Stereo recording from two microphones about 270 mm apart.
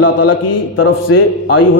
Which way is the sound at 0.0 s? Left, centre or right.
Left.